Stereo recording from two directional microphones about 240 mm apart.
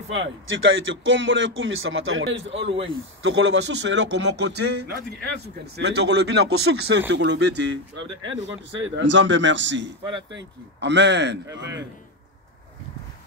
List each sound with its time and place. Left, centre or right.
0.1 s speech: right